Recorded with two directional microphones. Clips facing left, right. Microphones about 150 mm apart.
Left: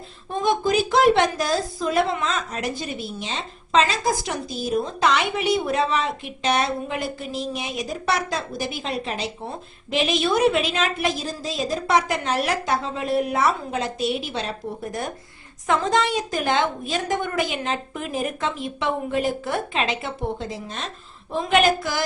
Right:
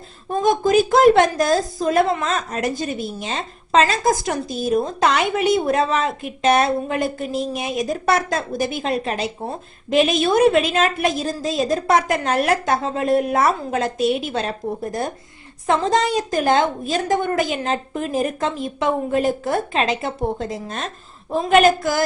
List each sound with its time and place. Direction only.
0.4 s a woman's voice: 45° right (ahead or behind)
14.6 s a woman's voice: 35° right (ahead or behind)